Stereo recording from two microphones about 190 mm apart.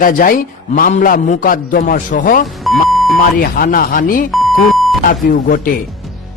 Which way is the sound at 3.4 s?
50° left (ahead or behind).